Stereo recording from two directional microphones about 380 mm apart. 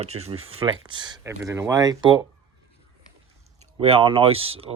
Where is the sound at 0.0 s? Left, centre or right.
Centre.